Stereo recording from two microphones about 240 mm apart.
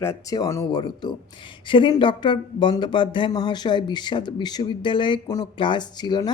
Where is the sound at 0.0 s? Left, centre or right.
Centre.